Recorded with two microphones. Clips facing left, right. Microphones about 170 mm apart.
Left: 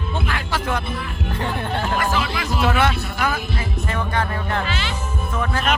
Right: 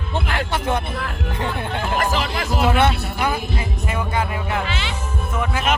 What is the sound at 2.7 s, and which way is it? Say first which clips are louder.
Speech: right 2 dB; 20° right (ahead or behind).